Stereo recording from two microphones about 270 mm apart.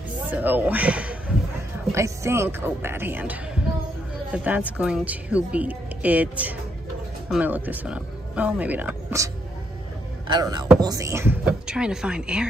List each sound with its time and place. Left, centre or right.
0.3 s a woman's voice: centre